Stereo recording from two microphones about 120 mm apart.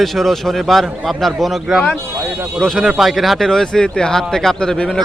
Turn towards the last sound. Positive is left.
turn(degrees=5)  # may be behind; listen again after turning